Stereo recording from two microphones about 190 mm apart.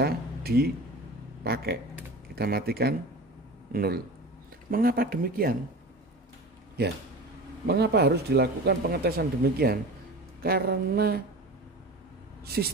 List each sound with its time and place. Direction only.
0.0 s speech: 55° right (ahead or behind)
7.6 s speech: 55° right (ahead or behind)
12.4 s speech: 55° right (ahead or behind)